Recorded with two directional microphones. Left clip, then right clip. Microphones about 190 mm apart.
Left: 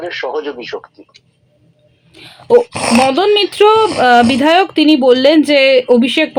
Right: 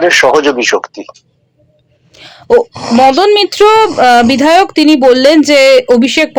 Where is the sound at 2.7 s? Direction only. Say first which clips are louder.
Even; 60° left (ahead or behind).